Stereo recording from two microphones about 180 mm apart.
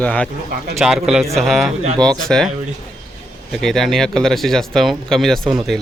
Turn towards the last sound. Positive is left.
turn(degrees=0)  # may be behind; listen again after turning